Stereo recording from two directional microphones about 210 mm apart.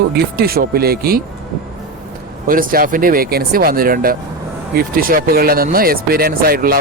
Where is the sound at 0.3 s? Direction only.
45° right (ahead or behind).